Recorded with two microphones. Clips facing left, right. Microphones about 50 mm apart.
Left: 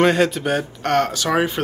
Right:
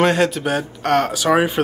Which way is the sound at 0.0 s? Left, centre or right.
Centre.